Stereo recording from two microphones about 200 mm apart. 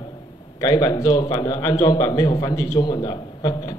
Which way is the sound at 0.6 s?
20° left (ahead or behind).